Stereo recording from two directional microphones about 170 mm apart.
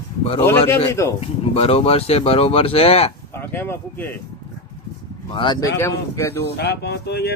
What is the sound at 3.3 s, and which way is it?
Speech, 15° left (ahead or behind).